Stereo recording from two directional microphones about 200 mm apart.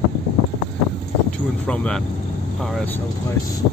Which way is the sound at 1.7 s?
5° left (ahead or behind).